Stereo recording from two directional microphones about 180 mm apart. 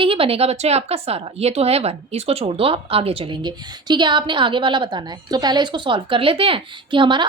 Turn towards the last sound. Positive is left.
turn(degrees=-25)  # may be behind; listen again after turning